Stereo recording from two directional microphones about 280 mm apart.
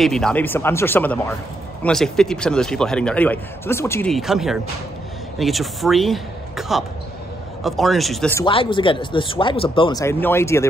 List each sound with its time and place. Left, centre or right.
0.0 s speech: centre
8.5 s speech: centre